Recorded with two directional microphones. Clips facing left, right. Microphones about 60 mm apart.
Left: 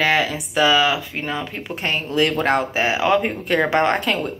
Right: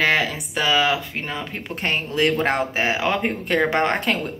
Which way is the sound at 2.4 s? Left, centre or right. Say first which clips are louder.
Left 2 dB; centre.